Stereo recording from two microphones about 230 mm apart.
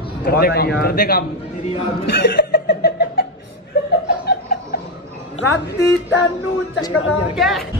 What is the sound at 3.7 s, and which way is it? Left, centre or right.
Chuckle, left.